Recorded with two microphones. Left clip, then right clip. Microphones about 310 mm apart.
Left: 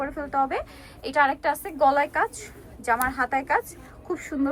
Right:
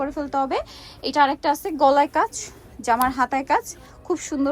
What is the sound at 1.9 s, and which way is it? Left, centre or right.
Speech, right.